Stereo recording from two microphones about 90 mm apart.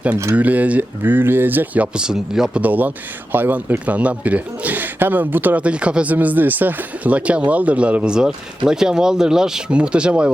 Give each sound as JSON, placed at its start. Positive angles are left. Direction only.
{"t": 0.3, "sound": "speech", "side_deg": -15}
{"t": 2.6, "sound": "speech", "side_deg": -20}